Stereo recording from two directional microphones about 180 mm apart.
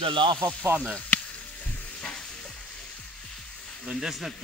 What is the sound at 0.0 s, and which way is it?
Speech, 30° right (ahead or behind).